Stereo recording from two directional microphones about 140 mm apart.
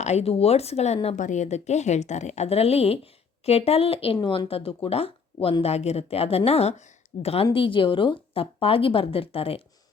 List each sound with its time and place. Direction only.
0.0 s a woman's voice: 50° left (ahead or behind)
1.0 s a woman's voice: 60° left (ahead or behind); by 9.6 s 40° left (ahead or behind)